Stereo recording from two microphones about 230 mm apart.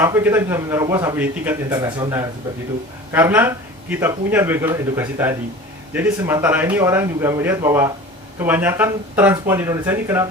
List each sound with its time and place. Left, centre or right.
0.0 s a man's voice: centre